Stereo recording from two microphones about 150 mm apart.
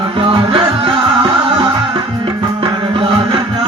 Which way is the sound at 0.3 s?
35° right (ahead or behind).